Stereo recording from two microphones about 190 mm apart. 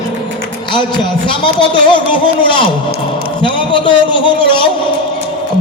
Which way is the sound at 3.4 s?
25° left (ahead or behind).